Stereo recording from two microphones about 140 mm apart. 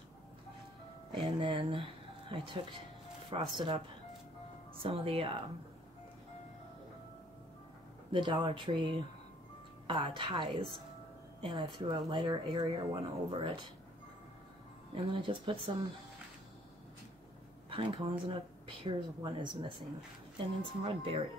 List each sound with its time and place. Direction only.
1.1 s speech: 35° right (ahead or behind)
4.8 s speech: 40° right (ahead or behind)
8.1 s speech: 35° right (ahead or behind)
15.0 s speech: 35° right (ahead or behind)
17.6 s speech: 40° right (ahead or behind)